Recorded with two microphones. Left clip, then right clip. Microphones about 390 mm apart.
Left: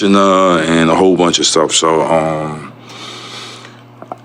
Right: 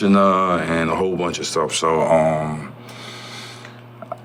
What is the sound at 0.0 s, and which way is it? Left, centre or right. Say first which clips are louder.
Speech: left 6 dB; centre.